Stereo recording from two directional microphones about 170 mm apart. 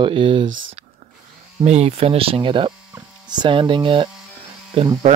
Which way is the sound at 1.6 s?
40° right (ahead or behind).